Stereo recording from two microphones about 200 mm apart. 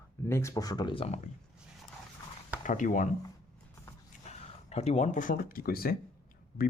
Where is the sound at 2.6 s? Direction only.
40° left (ahead or behind).